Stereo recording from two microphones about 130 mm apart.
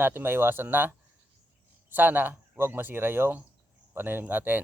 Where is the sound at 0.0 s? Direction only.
15° right (ahead or behind).